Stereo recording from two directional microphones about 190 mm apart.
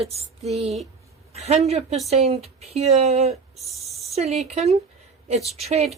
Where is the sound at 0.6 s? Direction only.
Centre (ahead or behind).